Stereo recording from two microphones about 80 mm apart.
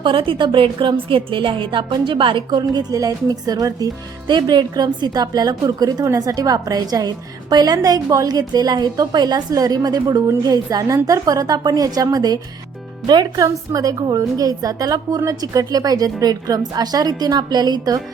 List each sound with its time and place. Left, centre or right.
0.0 s a woman's voice: right
4.3 s a woman's voice: right